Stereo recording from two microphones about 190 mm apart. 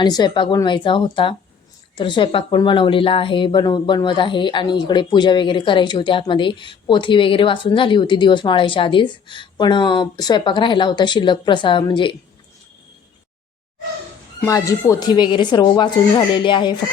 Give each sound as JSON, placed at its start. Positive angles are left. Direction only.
{"t": 0.0, "sound": "speech", "side_deg": 20}
{"t": 14.4, "sound": "speech", "side_deg": 15}